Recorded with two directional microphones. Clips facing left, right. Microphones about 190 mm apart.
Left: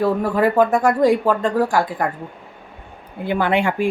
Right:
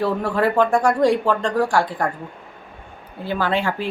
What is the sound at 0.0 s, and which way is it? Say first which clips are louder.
Speech: left 3 dB; 10° left (ahead or behind).